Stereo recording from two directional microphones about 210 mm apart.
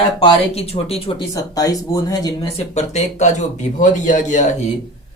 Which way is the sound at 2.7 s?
35° left (ahead or behind).